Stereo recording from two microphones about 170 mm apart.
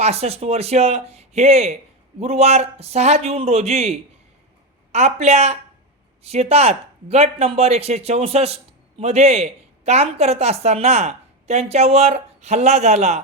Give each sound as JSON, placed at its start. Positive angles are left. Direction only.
{"t": 0.0, "sound": "a woman's voice", "side_deg": -40}